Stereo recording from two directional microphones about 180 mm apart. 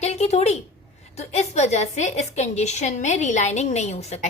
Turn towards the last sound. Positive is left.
turn(degrees=35)  # may be behind; listen again after turning